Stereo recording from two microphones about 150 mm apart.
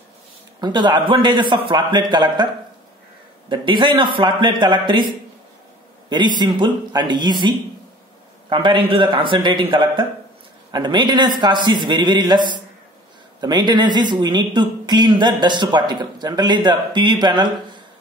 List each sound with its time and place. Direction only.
0.6 s a man's voice: 30° right (ahead or behind)